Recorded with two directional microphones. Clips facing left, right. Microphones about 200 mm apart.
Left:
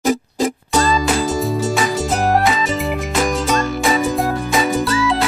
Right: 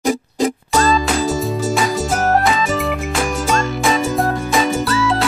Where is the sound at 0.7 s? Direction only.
Centre (ahead or behind).